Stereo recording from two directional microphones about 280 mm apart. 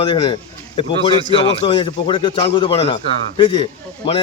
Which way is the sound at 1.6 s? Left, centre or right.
Centre.